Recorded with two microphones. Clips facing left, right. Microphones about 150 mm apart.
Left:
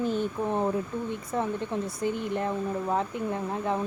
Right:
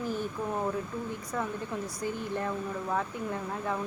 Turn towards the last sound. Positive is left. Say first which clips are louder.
# left 4 dB
turn(degrees=25)  # may be behind; listen again after turning